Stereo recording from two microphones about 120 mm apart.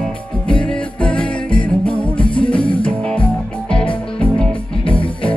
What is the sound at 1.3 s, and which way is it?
Music, 45° left (ahead or behind).